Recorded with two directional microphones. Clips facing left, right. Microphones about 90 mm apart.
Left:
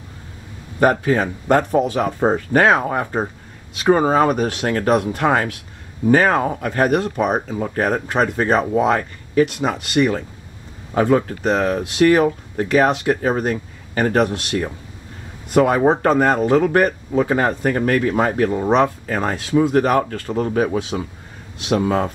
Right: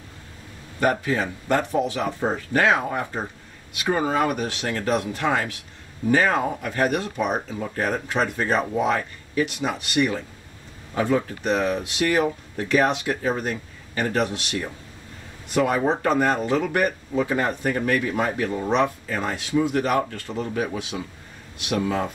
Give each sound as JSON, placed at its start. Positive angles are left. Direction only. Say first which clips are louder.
{"t": 0.7, "sound": "speech", "louder": "left 6 dB", "side_deg": 50}
{"t": 4.4, "sound": "speech", "louder": "left 7 dB", "side_deg": 50}